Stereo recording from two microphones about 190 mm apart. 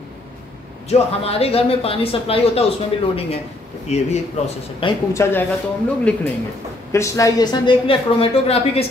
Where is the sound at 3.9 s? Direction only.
35° left (ahead or behind).